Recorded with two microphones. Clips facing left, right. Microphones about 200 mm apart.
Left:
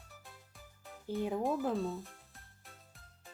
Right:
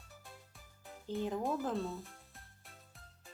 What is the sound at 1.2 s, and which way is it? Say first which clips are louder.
Speech: left 2 dB; 15° left (ahead or behind).